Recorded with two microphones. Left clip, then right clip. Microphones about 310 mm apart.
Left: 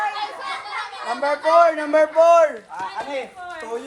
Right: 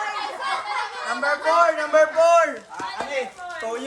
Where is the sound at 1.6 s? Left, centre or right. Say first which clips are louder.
Left 2 dB; centre.